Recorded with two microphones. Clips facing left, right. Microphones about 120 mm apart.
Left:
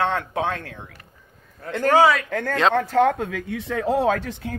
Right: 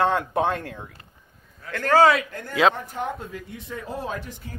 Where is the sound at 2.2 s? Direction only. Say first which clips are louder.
Left 1 dB; 90° left; by 4.6 s 70° left (ahead or behind).